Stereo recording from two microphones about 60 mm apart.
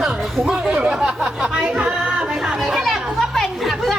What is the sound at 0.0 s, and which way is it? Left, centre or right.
Speech, centre.